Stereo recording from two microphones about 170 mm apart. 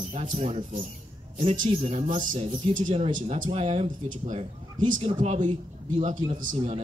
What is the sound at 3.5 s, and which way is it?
Speech, 35° right (ahead or behind).